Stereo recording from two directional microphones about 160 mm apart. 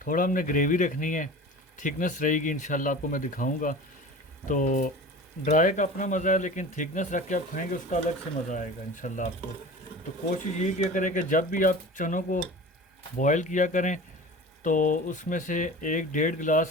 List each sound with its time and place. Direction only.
0.0 s speech: 55° left (ahead or behind)
10.3 s speech: 55° left (ahead or behind)